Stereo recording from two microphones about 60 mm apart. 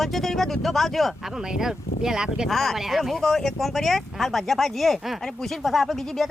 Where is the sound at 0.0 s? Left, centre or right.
Centre.